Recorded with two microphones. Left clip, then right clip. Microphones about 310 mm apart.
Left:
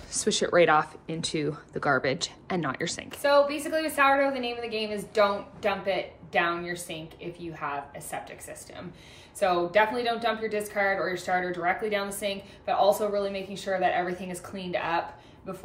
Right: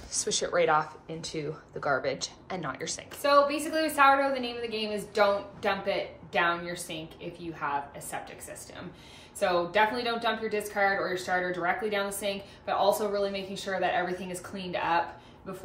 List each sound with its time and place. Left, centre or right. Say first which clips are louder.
0.1 s speech: left 4 dB; left
3.2 s a woman's voice: left 1 dB; centre
9.4 s a woman's voice: left 2 dB; centre